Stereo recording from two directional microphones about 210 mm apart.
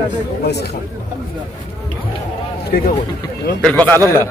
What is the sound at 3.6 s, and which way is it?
Speech, 5° left (ahead or behind).